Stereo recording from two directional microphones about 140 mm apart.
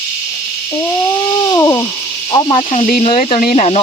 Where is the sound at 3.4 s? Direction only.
90° left.